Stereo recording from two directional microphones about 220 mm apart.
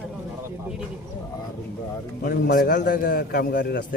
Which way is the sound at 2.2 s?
40° left (ahead or behind).